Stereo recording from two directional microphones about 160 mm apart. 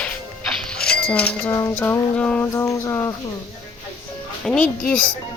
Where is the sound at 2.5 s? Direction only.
20° left (ahead or behind).